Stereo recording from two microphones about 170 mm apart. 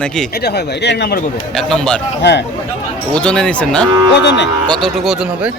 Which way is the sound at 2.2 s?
90° left.